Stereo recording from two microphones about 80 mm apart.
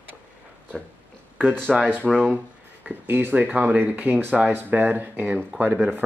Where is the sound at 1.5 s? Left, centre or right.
Centre.